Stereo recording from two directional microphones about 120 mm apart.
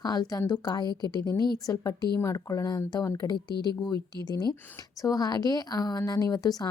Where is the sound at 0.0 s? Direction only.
35° left (ahead or behind).